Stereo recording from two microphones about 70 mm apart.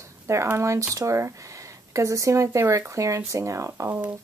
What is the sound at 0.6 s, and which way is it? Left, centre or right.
Speech, right.